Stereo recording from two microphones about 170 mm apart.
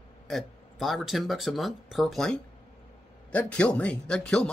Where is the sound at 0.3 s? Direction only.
Centre (ahead or behind).